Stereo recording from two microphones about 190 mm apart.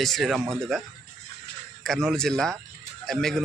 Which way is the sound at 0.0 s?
Centre (ahead or behind).